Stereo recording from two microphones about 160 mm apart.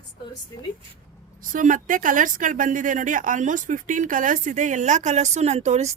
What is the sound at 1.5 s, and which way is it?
Speech, 55° right (ahead or behind).